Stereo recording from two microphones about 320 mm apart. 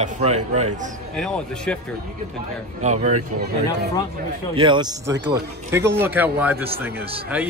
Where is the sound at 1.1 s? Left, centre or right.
Centre.